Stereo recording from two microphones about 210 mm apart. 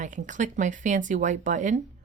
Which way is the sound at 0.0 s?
35° right (ahead or behind).